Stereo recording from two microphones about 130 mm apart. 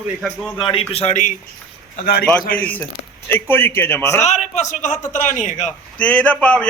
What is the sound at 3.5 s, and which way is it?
Speech, 15° left (ahead or behind).